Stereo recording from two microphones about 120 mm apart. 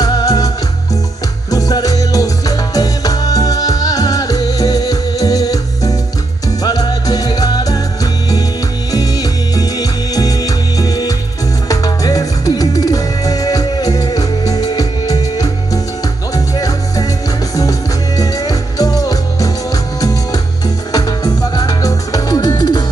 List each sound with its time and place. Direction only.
0.0 s music: 30° left (ahead or behind)
1.5 s music: 30° left (ahead or behind)